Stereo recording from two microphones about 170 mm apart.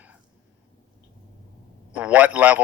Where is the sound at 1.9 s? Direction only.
10° right (ahead or behind).